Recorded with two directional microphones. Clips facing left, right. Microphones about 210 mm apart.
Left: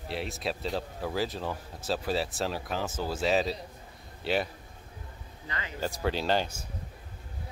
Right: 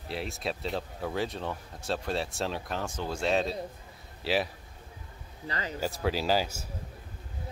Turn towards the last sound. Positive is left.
turn(degrees=-5)  # may be behind; listen again after turning